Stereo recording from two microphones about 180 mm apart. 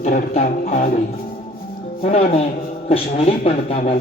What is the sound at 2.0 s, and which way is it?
Speech, 35° left (ahead or behind).